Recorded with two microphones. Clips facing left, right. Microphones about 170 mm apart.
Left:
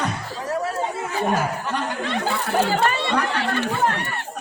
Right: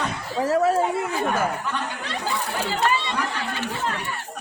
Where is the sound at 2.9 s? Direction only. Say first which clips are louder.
Left 3 dB; 60° left (ahead or behind).